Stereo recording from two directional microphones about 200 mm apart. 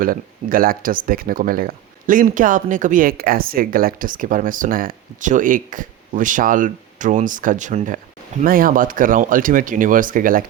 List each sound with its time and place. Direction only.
0.0 s speech: 45° right (ahead or behind)